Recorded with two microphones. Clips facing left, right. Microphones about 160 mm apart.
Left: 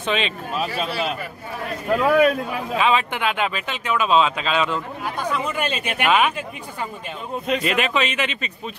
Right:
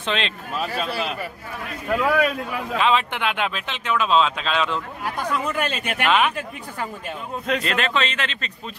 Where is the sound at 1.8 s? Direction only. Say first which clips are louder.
Left 3 dB; 25° left (ahead or behind).